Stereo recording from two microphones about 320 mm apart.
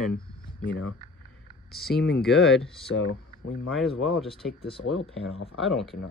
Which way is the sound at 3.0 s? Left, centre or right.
Left.